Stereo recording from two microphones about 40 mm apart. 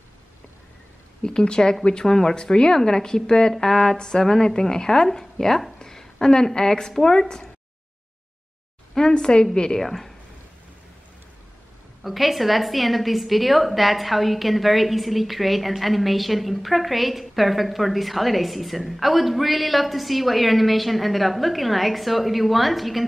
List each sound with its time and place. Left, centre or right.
1.2 s speech: left
5.8 s a sound: centre
7.0 s speech: centre
9.1 s speech: centre
9.8 s speech: centre
12.0 s a woman's voice: centre